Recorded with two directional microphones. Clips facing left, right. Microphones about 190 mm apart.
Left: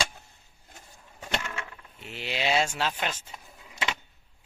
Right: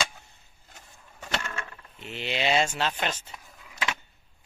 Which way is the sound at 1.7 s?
5° left (ahead or behind).